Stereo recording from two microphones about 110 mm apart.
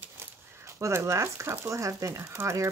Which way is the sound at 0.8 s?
25° right (ahead or behind).